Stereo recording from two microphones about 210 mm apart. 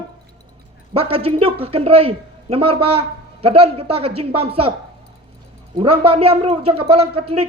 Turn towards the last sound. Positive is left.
turn(degrees=-30)  # may be behind; listen again after turning